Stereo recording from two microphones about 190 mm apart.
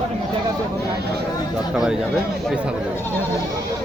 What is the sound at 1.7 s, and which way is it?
Speech, 5° right (ahead or behind).